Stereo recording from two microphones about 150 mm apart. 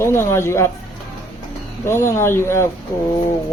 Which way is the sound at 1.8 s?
15° left (ahead or behind).